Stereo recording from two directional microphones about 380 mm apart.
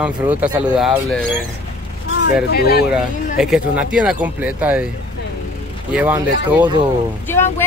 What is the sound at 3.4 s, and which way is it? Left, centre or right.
Speech, centre.